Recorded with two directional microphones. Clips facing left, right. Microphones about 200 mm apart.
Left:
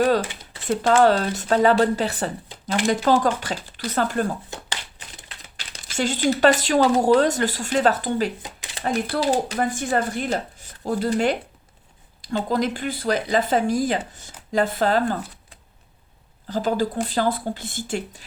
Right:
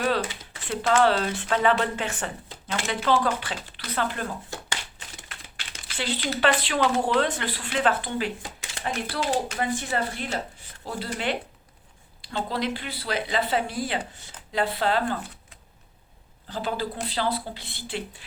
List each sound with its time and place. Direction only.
0.0 s speech: 35° left (ahead or behind)
5.5 s speech: 40° left (ahead or behind)